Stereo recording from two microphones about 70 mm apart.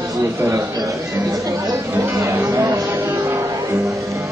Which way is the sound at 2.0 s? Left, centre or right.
Right.